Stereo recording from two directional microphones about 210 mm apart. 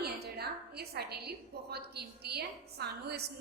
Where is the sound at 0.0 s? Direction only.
50° right (ahead or behind).